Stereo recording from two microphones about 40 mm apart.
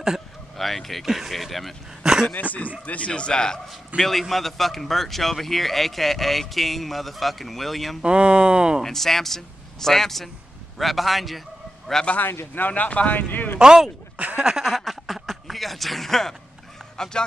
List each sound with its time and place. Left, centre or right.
0.6 s a man's voice: centre
1.0 s a man's voice: centre
2.0 s a sound: centre
2.8 s a man's voice: left
3.6 s a man's voice: centre
8.0 s speech: right
8.8 s a man's voice: centre
11.9 s speech: centre
12.5 s speech: left
13.6 s speech: centre
14.1 s a sound: right
14.4 s a sound: centre
14.7 s a sound: centre
16.9 s speech: centre